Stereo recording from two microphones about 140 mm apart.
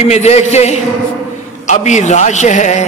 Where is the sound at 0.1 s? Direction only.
50° left (ahead or behind).